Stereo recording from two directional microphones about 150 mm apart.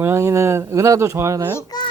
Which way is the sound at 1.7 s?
25° left (ahead or behind).